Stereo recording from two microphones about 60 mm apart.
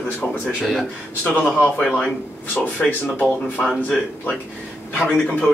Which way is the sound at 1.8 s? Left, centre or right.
Centre.